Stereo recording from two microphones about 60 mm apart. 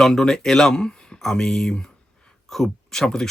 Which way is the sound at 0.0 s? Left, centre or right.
Centre.